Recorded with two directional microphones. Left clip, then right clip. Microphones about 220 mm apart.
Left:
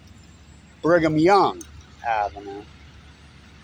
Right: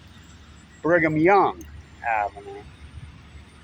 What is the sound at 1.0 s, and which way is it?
Speech, 20° left (ahead or behind).